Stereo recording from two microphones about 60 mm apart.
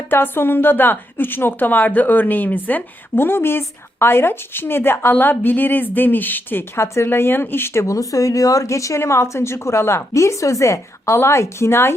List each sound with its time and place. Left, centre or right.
0.1 s a woman's voice: left
6.8 s speech: left